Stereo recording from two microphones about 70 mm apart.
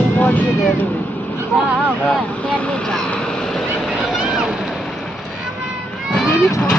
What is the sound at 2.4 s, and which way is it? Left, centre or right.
Speech, centre.